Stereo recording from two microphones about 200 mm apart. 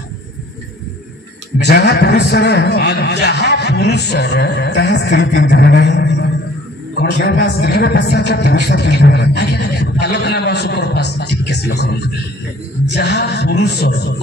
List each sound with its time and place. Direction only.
1.6 s a man's voice: 55° left (ahead or behind)
12.9 s a man's voice: 55° left (ahead or behind)